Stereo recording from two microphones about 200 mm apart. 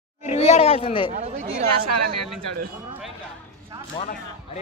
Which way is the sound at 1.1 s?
40° right (ahead or behind).